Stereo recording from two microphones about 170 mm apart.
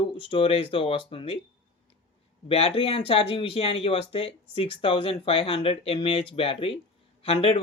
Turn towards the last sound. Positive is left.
turn(degrees=35)  # may be behind; listen again after turning